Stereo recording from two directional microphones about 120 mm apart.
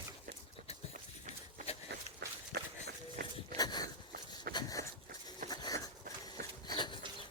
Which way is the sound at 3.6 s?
35° left (ahead or behind).